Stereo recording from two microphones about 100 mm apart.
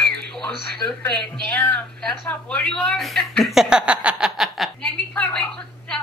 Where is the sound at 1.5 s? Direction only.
20° left (ahead or behind).